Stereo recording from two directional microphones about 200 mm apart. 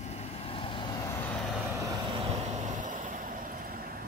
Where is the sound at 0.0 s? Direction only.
30° left (ahead or behind).